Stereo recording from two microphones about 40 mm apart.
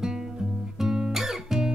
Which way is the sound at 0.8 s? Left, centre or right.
Centre.